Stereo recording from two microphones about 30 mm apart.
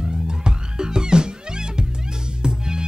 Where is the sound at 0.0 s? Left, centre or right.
Right.